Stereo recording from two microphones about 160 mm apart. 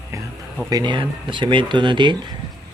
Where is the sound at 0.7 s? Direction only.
25° right (ahead or behind).